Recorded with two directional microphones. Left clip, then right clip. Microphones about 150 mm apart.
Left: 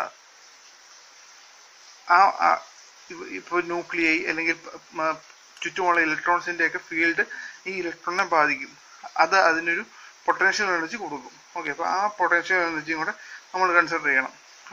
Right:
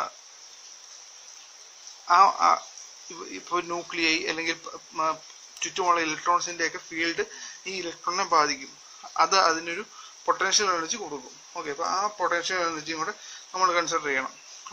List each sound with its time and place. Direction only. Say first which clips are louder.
2.0 s speech: left 1 dB; 25° right (ahead or behind)
3.5 s a man's voice: left 3 dB; 25° right (ahead or behind)